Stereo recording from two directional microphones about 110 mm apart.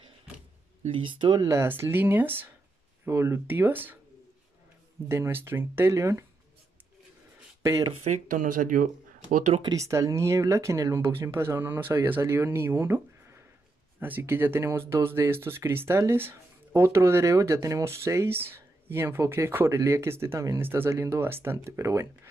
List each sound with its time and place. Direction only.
0.9 s speech: 50° right (ahead or behind)
1.5 s speech: 25° right (ahead or behind)
5.0 s speech: 20° right (ahead or behind)
7.6 s speech: 30° right (ahead or behind)
9.6 s speech: 30° right (ahead or behind)